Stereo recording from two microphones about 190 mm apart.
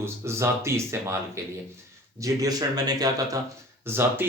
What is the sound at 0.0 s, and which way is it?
Speech, 15° right (ahead or behind).